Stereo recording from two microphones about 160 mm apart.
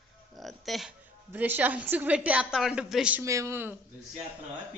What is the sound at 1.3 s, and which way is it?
A woman's voice, 10° right (ahead or behind).